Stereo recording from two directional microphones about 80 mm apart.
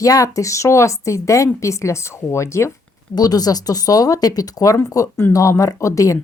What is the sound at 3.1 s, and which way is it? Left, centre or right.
A woman's voice, left.